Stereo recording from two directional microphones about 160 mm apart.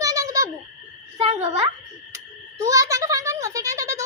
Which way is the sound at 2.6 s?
20° right (ahead or behind).